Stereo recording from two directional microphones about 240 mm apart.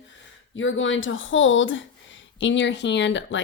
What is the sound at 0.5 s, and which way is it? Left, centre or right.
Speech, left.